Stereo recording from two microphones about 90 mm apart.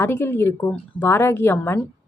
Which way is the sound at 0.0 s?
25° left (ahead or behind).